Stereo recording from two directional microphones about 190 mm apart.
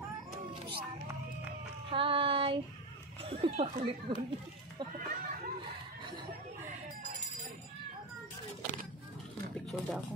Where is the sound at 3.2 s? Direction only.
30° right (ahead or behind).